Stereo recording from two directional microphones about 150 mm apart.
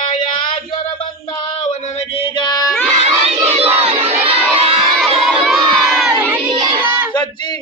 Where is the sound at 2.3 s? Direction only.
30° left (ahead or behind).